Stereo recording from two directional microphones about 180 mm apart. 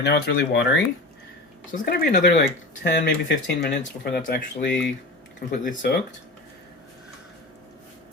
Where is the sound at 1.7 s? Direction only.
55° left (ahead or behind).